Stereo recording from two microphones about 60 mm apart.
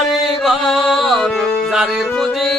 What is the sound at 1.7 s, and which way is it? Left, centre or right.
Music, centre.